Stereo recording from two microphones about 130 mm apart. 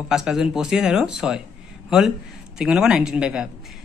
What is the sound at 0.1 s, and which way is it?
Speech, 5° right (ahead or behind).